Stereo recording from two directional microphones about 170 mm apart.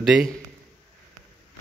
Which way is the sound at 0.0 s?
Centre (ahead or behind).